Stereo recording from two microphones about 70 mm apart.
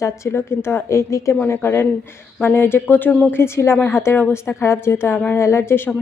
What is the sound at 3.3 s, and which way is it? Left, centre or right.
A woman's voice, left.